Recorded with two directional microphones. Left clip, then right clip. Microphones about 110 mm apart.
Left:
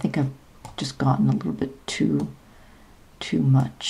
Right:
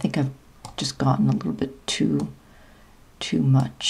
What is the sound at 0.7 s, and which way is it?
Speech, 20° right (ahead or behind).